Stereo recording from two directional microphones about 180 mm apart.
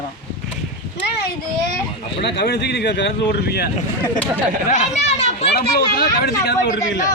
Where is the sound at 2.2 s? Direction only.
70° left (ahead or behind).